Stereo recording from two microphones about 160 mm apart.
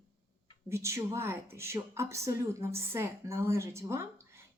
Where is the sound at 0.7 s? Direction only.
15° right (ahead or behind).